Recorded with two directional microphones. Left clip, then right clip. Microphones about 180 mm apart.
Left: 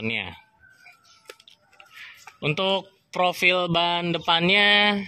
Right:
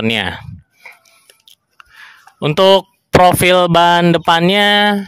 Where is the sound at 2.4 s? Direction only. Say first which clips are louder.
Right 14 dB; 50° right (ahead or behind).